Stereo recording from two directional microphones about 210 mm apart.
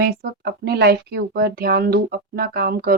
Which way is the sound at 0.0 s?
50° right (ahead or behind).